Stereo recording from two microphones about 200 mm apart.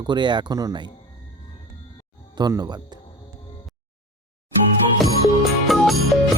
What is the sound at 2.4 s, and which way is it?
Speech, 20° right (ahead or behind).